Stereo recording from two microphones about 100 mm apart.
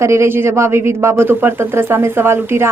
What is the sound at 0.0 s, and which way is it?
A man's voice, 30° right (ahead or behind).